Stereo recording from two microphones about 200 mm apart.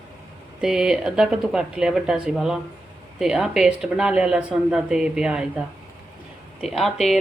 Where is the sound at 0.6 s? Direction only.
5° right (ahead or behind).